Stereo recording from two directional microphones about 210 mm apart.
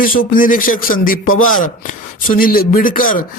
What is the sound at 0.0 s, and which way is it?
A man's voice, 40° left (ahead or behind).